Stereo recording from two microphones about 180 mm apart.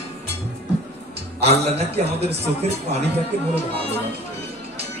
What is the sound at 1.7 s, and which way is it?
Speech, 35° right (ahead or behind).